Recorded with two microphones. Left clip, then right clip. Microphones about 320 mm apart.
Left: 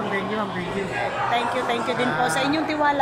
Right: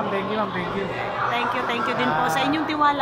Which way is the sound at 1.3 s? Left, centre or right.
Centre.